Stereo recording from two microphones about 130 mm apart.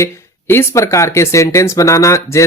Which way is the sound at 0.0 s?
20° left (ahead or behind).